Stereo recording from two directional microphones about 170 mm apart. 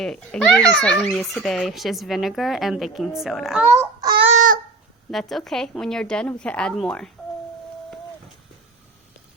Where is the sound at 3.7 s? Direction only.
15° right (ahead or behind).